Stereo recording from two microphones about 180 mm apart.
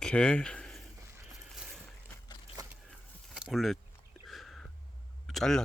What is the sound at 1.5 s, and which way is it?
Boat, 5° right (ahead or behind).